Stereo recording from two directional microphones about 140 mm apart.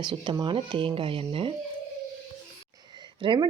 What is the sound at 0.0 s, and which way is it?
Speech, 30° right (ahead or behind).